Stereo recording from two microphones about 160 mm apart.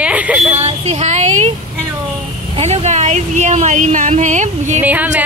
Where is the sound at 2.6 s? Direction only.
40° right (ahead or behind).